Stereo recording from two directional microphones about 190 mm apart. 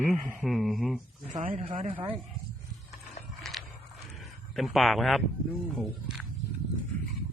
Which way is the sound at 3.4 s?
Centre (ahead or behind).